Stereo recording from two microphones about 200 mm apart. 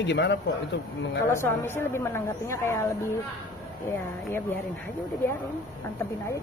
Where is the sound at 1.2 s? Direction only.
10° left (ahead or behind).